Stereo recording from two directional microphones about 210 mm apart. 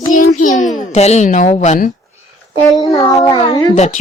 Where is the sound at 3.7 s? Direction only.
35° left (ahead or behind).